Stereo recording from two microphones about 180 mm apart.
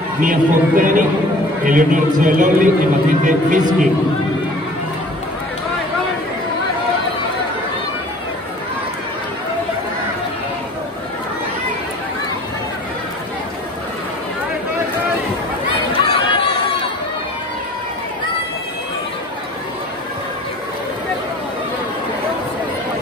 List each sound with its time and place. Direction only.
0.2 s a man's voice: 50° right (ahead or behind)
16.0 s chatter: 30° left (ahead or behind)